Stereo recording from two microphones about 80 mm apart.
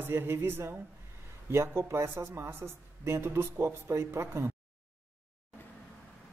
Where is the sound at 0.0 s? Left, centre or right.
Right.